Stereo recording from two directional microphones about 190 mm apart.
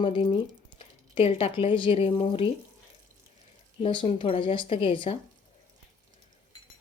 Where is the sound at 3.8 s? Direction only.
25° left (ahead or behind).